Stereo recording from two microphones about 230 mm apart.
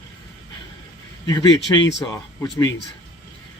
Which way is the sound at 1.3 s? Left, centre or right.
Centre.